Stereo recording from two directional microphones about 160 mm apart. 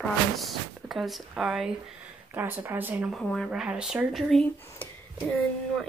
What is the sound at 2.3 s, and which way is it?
Speech, 15° right (ahead or behind).